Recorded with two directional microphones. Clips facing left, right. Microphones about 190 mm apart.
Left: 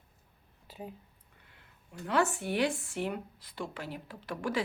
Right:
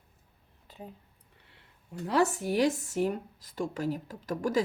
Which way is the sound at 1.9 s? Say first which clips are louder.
Right 3 dB; 35° right (ahead or behind).